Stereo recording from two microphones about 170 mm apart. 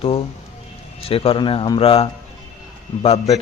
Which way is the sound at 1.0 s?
35° left (ahead or behind).